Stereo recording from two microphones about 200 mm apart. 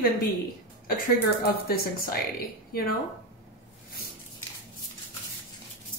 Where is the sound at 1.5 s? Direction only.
50° left (ahead or behind).